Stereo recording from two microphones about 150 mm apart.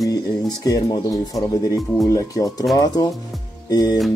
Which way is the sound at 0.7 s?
25° left (ahead or behind).